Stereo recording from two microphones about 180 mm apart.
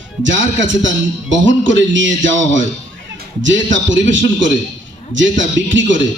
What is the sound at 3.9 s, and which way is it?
Speech, 90° right.